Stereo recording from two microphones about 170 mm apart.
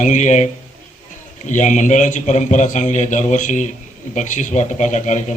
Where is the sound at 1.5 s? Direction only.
45° left (ahead or behind).